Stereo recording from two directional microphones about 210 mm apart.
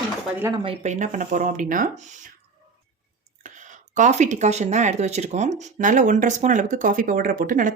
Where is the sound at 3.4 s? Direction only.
35° right (ahead or behind).